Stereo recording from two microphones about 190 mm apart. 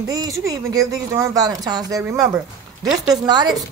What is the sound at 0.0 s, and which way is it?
Speech, 20° right (ahead or behind).